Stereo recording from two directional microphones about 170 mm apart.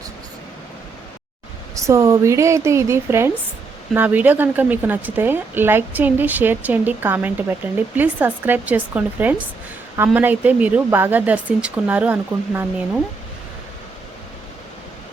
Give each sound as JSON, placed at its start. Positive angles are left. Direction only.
{"t": 1.7, "sound": "a woman's voice", "side_deg": -20}